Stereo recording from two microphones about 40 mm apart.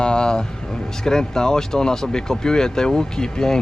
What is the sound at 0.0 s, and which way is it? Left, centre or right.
Vehicle, centre.